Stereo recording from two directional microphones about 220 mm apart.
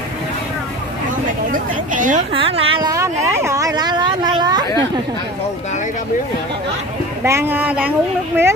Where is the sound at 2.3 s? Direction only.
25° right (ahead or behind).